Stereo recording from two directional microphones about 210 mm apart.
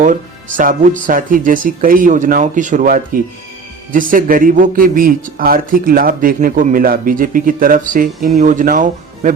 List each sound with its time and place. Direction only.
0.0 s speech: 40° right (ahead or behind)